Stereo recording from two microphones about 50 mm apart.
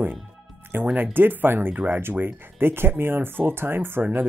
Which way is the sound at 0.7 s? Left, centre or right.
Right.